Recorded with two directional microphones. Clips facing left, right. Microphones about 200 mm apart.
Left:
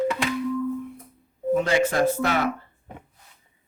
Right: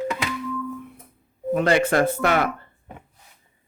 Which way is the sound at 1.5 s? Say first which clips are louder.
Right 2 dB; 60° right (ahead or behind).